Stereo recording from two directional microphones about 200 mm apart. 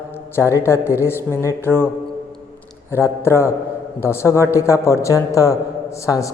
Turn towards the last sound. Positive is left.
turn(degrees=15)  # may be behind; listen again after turning